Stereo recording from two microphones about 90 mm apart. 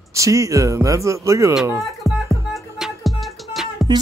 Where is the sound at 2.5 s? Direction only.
5° right (ahead or behind).